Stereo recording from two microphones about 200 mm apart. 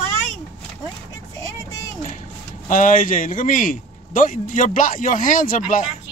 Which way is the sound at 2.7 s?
40° left (ahead or behind).